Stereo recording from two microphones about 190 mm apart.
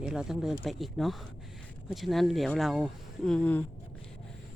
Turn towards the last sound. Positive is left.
turn(degrees=5)  # may be behind; listen again after turning